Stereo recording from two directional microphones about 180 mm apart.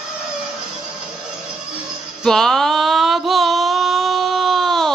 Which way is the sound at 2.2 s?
5° left (ahead or behind).